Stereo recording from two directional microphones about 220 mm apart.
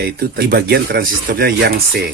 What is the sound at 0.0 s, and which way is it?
Speech, 45° right (ahead or behind).